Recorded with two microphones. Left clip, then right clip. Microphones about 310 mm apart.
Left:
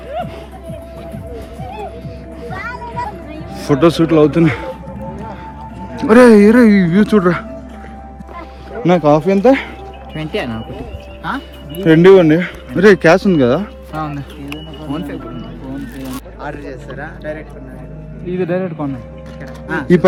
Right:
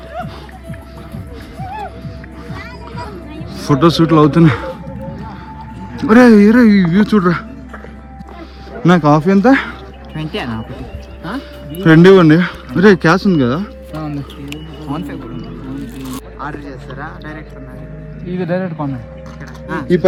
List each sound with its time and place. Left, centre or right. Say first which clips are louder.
3.5 s speech: even; centre
6.0 s speech: left 2 dB; centre
8.8 s speech: even; centre
11.8 s speech: even; centre
14.8 s music: even; centre
16.4 s speech: even; centre
18.3 s speech: left 1 dB; right
19.6 s speech: left 2 dB; centre